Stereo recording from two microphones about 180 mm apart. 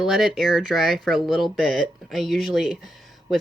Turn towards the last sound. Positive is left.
turn(degrees=0)  # may be behind; listen again after turning